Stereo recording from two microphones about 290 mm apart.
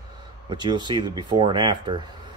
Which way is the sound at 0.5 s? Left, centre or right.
Centre.